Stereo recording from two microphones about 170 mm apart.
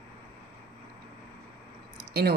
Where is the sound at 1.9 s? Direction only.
65° right (ahead or behind).